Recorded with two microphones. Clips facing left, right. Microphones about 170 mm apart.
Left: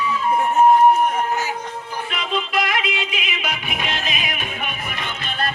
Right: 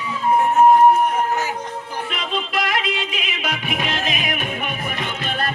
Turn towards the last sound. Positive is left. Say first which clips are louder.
# right 3 dB
turn(degrees=-40)  # may be behind; listen again after turning